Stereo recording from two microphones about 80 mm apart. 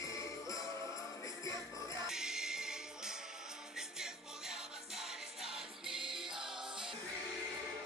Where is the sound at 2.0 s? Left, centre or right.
Centre.